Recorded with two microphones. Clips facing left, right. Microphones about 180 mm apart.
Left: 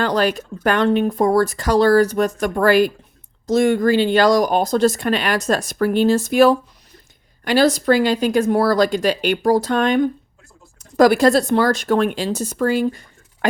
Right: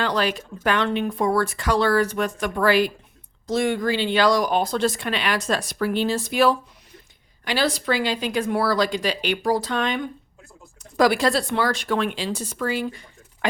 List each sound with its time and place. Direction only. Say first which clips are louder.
0.0 s speech: left 5 dB; 45° left (ahead or behind)